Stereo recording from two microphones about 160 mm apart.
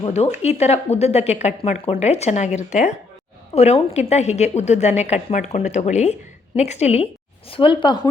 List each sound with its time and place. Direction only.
0.1 s speech: 45° left (ahead or behind)